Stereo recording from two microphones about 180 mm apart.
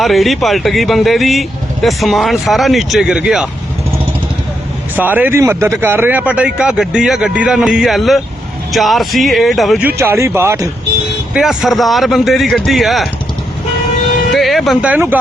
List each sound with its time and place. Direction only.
0.0 s speech: centre (ahead or behind)
4.9 s speech: 10° right (ahead or behind)
10.0 s speech: 15° right (ahead or behind)
11.3 s speech: centre (ahead or behind)
14.3 s speech: centre (ahead or behind)